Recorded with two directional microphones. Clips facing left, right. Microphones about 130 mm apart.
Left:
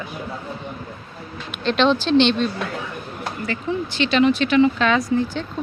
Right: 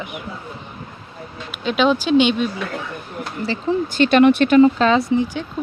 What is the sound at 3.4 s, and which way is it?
Speech, 30° right (ahead or behind).